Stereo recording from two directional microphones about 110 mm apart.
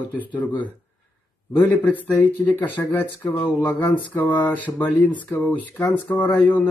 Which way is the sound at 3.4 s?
15° left (ahead or behind).